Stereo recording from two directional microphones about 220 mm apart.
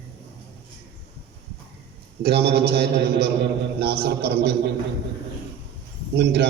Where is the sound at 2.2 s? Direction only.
45° right (ahead or behind).